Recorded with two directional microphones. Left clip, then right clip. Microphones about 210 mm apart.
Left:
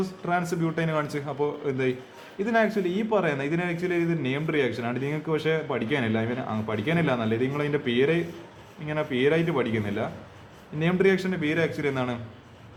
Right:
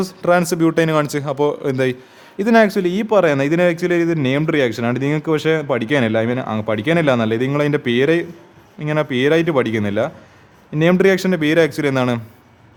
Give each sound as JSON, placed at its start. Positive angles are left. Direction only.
{"t": 0.0, "sound": "a man's voice", "side_deg": -55}